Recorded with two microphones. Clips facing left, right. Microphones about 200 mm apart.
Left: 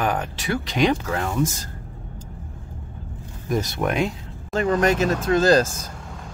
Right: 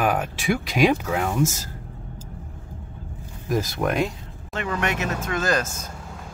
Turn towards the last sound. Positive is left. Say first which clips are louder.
# left 7 dB
turn(degrees=30)  # may be behind; listen again after turning